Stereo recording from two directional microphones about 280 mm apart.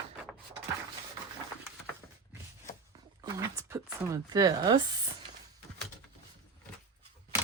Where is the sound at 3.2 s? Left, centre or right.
Centre.